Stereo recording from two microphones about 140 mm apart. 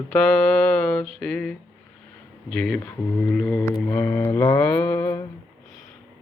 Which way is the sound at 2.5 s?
5° left (ahead or behind).